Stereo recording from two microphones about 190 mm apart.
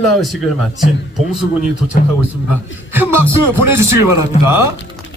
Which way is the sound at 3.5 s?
15° right (ahead or behind).